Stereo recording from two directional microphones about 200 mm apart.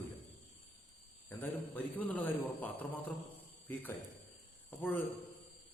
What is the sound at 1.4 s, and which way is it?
A man's voice, 10° left (ahead or behind).